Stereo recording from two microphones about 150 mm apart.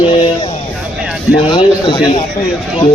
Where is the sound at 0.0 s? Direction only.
35° left (ahead or behind).